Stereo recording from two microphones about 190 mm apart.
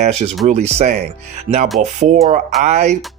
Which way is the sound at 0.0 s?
35° right (ahead or behind).